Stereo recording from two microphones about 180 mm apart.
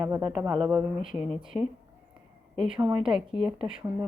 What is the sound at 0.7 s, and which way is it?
A woman's voice, 10° right (ahead or behind).